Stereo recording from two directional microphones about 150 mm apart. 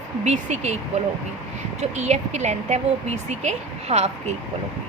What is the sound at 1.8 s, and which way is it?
A woman's voice, 50° right (ahead or behind).